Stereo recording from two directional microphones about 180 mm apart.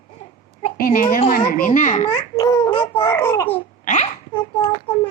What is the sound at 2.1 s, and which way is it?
A child's voice, 20° left (ahead or behind).